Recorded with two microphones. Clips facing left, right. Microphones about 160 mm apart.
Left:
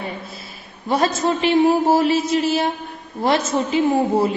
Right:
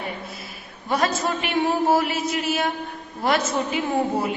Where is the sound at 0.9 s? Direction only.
25° left (ahead or behind).